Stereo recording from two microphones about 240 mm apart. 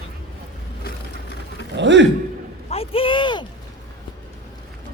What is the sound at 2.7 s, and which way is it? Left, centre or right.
Speech, left.